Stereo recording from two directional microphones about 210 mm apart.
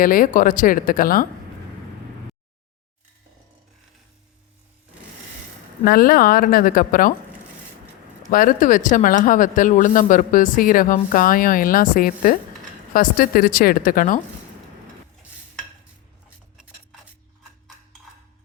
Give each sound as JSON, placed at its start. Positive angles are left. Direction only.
{"t": 0.0, "sound": "speech", "side_deg": 40}
{"t": 5.8, "sound": "speech", "side_deg": 45}
{"t": 8.3, "sound": "speech", "side_deg": 40}